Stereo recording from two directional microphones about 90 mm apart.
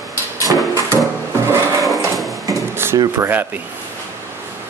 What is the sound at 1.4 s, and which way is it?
Sewing machine, 35° right (ahead or behind).